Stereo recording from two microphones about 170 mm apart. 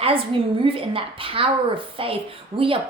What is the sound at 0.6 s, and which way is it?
Speech, 30° right (ahead or behind).